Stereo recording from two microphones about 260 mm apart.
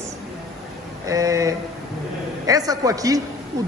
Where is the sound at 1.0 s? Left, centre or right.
Centre.